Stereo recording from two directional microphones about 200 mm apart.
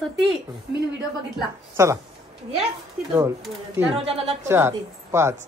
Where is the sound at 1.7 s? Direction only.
15° right (ahead or behind).